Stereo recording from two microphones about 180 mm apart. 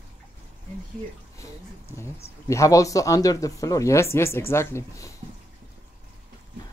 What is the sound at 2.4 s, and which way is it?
Speech, 15° left (ahead or behind).